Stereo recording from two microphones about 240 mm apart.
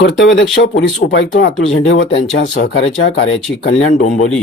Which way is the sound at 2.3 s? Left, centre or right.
Left.